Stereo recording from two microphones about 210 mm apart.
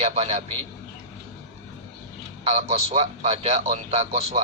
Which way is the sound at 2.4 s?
30° right (ahead or behind).